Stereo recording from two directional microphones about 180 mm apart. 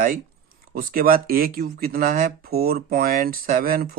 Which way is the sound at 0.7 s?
55° right (ahead or behind).